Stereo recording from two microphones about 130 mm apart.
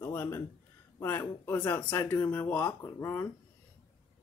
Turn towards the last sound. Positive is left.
turn(degrees=20)  # may be behind; listen again after turning